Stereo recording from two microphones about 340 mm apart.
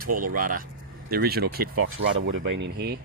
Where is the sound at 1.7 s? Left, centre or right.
Right.